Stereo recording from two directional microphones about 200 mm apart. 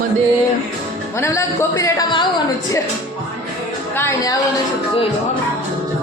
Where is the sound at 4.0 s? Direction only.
15° left (ahead or behind).